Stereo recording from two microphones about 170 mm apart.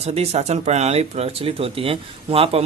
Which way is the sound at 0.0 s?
35° right (ahead or behind).